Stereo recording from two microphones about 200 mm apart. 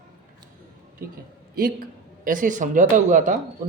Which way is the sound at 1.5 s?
45° right (ahead or behind).